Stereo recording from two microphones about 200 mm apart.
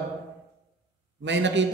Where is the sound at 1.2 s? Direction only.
65° right (ahead or behind).